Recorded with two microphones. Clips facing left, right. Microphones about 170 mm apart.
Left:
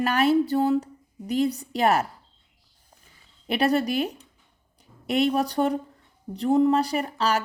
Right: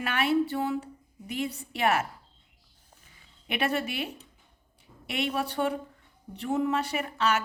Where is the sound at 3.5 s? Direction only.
35° left (ahead or behind).